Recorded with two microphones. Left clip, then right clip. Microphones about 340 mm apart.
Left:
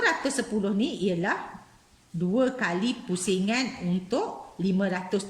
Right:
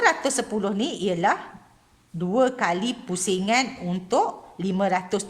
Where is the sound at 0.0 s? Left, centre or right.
Centre.